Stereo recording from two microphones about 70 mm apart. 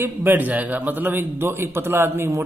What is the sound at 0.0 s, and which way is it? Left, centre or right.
A man's voice, right.